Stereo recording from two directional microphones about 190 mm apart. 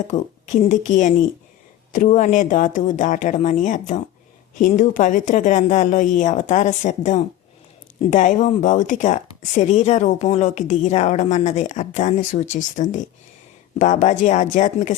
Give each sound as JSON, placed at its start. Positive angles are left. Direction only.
{"t": 0.1, "sound": "speech", "side_deg": 40}